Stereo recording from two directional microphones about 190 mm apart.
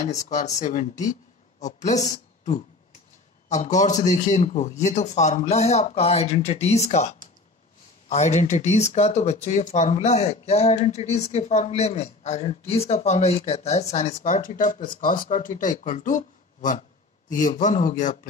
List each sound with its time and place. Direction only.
0.0 s a woman's voice: 40° left (ahead or behind)